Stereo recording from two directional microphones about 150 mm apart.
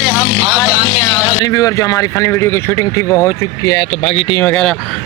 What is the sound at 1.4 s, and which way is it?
Speech, 25° left (ahead or behind).